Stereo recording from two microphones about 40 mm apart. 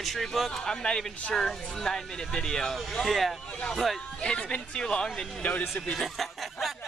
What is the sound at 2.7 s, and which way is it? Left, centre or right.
Speech, centre.